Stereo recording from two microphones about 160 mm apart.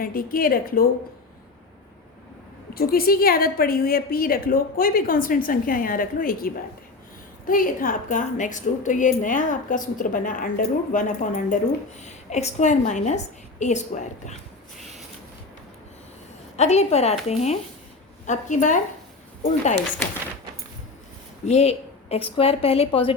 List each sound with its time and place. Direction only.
0.0 s a woman's voice: 65° left (ahead or behind)
2.7 s a woman's voice: 70° left (ahead or behind); by 14.3 s 50° left (ahead or behind)
16.6 s a woman's voice: 45° left (ahead or behind)
21.4 s a woman's voice: 45° left (ahead or behind)